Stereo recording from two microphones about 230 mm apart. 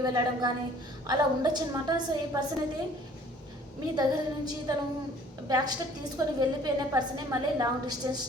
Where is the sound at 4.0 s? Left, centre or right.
Centre.